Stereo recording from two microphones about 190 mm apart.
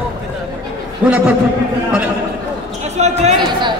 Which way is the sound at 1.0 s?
5° right (ahead or behind).